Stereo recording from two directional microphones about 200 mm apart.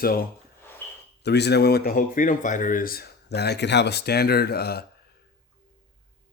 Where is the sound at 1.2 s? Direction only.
55° left (ahead or behind).